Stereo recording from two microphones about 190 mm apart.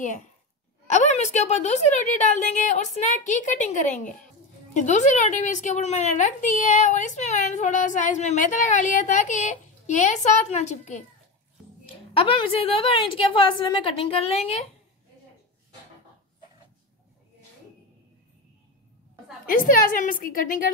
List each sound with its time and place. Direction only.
0.8 s a woman's voice: 40° left (ahead or behind)
19.4 s a woman's voice: 45° left (ahead or behind)